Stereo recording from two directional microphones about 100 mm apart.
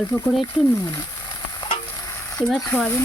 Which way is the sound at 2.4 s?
10° left (ahead or behind).